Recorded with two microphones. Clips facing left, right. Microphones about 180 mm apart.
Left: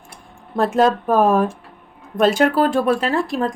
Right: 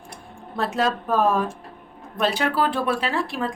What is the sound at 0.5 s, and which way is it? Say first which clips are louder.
Speech: left 7 dB; 50° left (ahead or behind).